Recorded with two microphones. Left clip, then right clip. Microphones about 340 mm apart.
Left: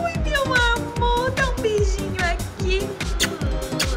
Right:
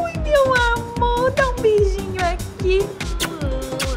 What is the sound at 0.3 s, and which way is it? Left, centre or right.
Music, centre.